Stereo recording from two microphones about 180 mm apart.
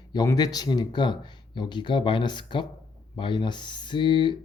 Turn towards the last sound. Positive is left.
turn(degrees=25)  # may be behind; listen again after turning